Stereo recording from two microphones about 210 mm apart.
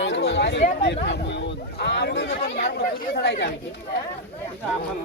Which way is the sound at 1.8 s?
55° left (ahead or behind).